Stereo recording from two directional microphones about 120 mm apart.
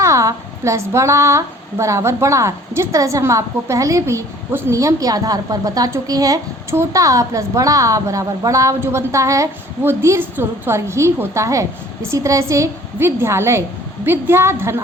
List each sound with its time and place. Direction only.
0.0 s a woman's voice: 25° right (ahead or behind)